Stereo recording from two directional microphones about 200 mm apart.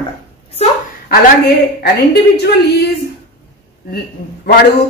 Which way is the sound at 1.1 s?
50° left (ahead or behind).